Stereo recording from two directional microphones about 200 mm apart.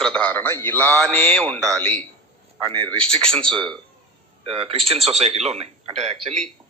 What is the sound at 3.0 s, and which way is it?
Speech, 30° right (ahead or behind).